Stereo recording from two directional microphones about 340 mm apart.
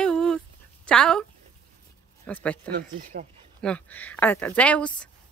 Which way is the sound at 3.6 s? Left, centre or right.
Centre.